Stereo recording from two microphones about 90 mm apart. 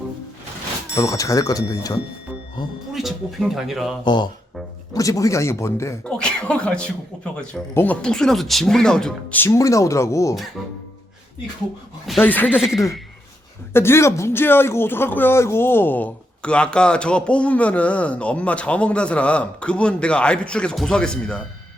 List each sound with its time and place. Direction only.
0.9 s speech: 40° left (ahead or behind)
2.6 s speech: 55° left (ahead or behind)
2.9 s speech: centre (ahead or behind)
4.0 s speech: 55° left (ahead or behind)
4.9 s speech: 40° left (ahead or behind)
6.1 s a man's voice: 10° left (ahead or behind)
7.7 s speech: 25° left (ahead or behind)
8.0 s speech: 5° left (ahead or behind)
9.3 s speech: 25° left (ahead or behind)
9.6 s speech: 35° left (ahead or behind)
12.2 s speech: 20° left (ahead or behind)
12.5 s speech: 5° right (ahead or behind)
13.7 s a man's voice: 25° left (ahead or behind); by 21.4 s 10° left (ahead or behind)